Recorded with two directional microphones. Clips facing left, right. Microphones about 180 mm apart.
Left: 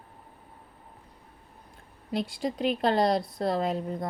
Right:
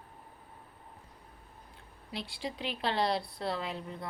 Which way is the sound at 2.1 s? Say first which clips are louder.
Left 9 dB; 45° left (ahead or behind).